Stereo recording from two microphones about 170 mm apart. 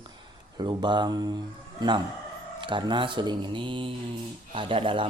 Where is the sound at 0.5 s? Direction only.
25° right (ahead or behind).